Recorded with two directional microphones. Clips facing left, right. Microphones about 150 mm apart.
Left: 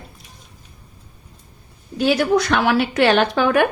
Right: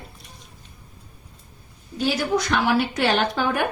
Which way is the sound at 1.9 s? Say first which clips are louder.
Left 6 dB; 70° left (ahead or behind).